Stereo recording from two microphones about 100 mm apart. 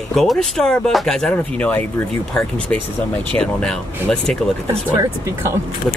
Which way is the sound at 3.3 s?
10° left (ahead or behind).